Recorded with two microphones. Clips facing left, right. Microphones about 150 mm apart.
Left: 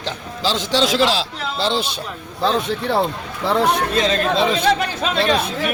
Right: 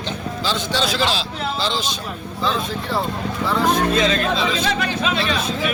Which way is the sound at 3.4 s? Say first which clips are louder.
Left 2 dB; 70° left (ahead or behind).